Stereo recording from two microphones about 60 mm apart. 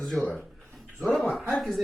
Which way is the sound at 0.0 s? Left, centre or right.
Centre.